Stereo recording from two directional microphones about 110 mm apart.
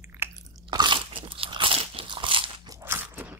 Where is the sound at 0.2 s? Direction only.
20° right (ahead or behind).